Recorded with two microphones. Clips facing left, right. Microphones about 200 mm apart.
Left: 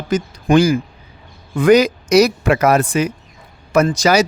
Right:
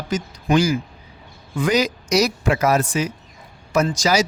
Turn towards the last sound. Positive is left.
turn(degrees=60)  # may be behind; listen again after turning